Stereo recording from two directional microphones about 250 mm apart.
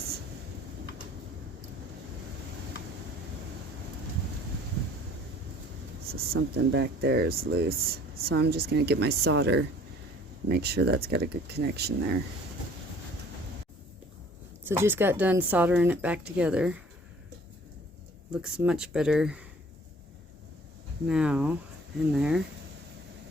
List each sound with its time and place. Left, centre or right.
6.1 s speech: right
14.6 s a woman's voice: centre
18.4 s speech: centre
21.1 s speech: centre